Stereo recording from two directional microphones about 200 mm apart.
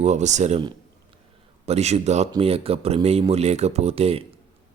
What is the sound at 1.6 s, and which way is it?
Speech, 30° right (ahead or behind).